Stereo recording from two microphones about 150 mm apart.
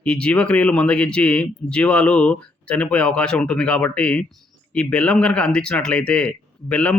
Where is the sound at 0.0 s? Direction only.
5° left (ahead or behind).